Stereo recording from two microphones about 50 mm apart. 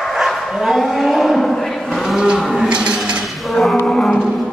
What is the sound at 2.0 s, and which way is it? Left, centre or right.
Cattle, centre.